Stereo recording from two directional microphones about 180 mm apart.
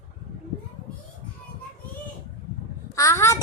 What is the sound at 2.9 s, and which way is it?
Speech, 15° left (ahead or behind).